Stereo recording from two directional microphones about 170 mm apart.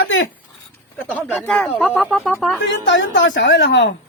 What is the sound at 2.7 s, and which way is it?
A woman's voice, 90° left.